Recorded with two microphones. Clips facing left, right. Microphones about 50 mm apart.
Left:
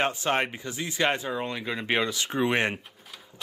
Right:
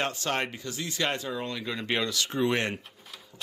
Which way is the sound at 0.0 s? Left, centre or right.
Left.